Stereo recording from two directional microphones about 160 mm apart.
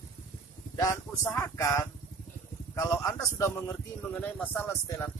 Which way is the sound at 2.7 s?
20° left (ahead or behind).